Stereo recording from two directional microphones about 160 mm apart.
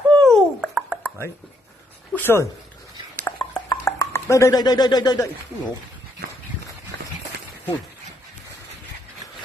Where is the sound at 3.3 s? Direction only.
15° left (ahead or behind).